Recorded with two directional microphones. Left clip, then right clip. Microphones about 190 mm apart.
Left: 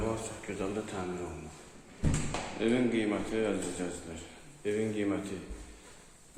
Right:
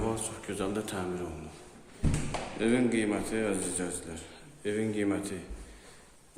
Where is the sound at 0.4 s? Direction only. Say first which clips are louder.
Right 3 dB; 25° right (ahead or behind).